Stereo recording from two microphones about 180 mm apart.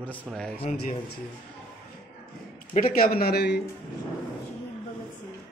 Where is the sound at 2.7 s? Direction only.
50° left (ahead or behind).